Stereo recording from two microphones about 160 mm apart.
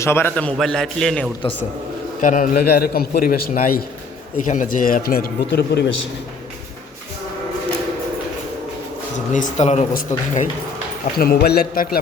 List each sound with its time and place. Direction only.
0.0 s a man's voice: 15° left (ahead or behind)
2.2 s a man's voice: 55° left (ahead or behind)
4.4 s a man's voice: 55° left (ahead or behind); by 5.8 s 90° left
9.3 s speech: 45° left (ahead or behind)
11.2 s a man's voice: 80° left; by 11.9 s 60° left (ahead or behind)